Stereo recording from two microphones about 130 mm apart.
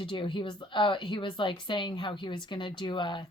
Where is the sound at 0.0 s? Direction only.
40° left (ahead or behind).